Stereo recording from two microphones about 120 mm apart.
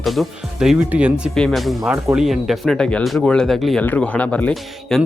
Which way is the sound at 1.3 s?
Centre (ahead or behind).